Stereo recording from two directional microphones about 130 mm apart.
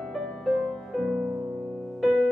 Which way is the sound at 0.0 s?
Centre (ahead or behind).